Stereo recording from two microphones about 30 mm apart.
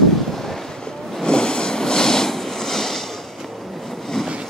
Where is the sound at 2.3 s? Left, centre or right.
Centre.